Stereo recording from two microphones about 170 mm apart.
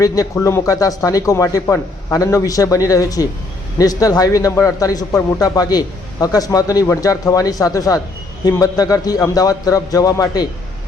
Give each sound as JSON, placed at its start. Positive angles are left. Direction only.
{"t": 0.0, "sound": "a man's voice", "side_deg": 20}